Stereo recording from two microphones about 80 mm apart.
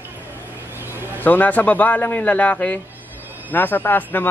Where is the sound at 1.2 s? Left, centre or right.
Left.